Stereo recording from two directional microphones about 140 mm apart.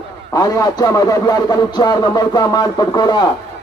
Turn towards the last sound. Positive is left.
turn(degrees=30)  # may be behind; listen again after turning